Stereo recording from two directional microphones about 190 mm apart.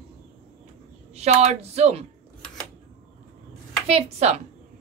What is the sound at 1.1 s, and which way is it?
Speech, 35° right (ahead or behind).